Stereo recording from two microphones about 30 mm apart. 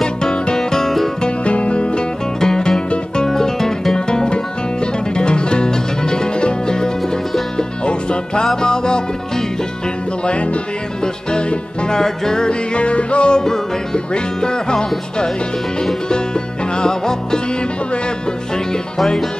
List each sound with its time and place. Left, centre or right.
0.0 s music: left
0.6 s music: centre
1.4 s music: left
2.4 s music: centre
11.9 s music: left
12.7 s music: left
16.8 s music: left